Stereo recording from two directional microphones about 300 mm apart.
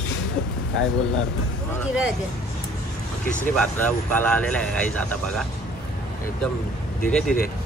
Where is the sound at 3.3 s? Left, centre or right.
Left.